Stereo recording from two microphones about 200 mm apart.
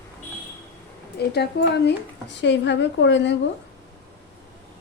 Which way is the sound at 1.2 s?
55° left (ahead or behind).